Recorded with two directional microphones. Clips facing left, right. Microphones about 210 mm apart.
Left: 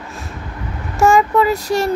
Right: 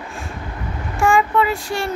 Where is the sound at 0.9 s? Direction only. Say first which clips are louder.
Left 4 dB; 40° left (ahead or behind).